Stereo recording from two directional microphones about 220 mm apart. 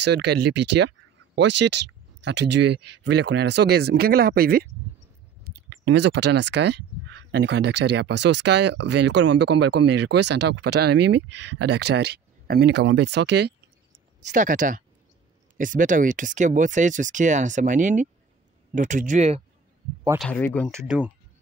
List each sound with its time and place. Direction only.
0.0 s speech: 50° right (ahead or behind)
14.3 s speech: 35° right (ahead or behind)
20.2 s speech: 5° left (ahead or behind)
20.8 s speech: 5° right (ahead or behind)